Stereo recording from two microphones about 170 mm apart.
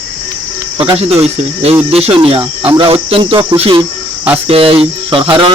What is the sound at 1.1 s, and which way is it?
Speech, 35° right (ahead or behind).